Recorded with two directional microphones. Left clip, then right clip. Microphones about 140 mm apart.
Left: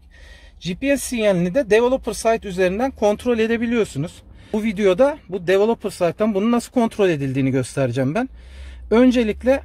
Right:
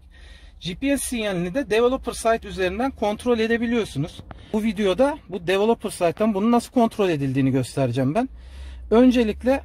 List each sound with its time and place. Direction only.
0.6 s speech: 40° left (ahead or behind)
4.5 s speech: 20° left (ahead or behind)